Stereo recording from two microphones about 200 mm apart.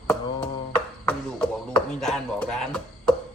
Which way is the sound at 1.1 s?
5° left (ahead or behind).